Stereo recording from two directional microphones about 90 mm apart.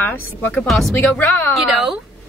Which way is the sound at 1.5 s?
5° right (ahead or behind).